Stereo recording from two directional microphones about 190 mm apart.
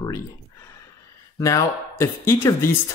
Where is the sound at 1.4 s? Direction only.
15° left (ahead or behind).